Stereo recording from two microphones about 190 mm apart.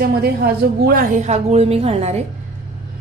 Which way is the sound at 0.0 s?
55° right (ahead or behind).